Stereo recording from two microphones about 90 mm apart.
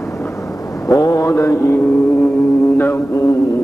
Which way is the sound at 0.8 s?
40° left (ahead or behind).